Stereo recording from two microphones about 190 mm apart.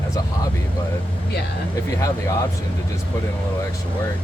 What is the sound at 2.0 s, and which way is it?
Speech, 15° left (ahead or behind).